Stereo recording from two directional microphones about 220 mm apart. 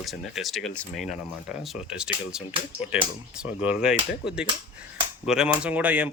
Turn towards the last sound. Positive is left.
turn(degrees=-5)  # may be behind; listen again after turning